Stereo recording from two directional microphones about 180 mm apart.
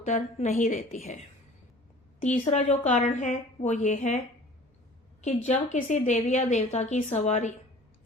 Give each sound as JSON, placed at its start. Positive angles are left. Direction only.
{"t": 0.0, "sound": "a woman's voice", "side_deg": 40}
{"t": 0.8, "sound": "a woman's voice", "side_deg": 35}
{"t": 2.2, "sound": "a woman's voice", "side_deg": 40}
{"t": 5.5, "sound": "a woman's voice", "side_deg": 40}